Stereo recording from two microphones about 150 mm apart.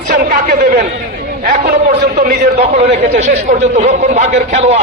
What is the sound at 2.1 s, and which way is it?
Speech, 90° right.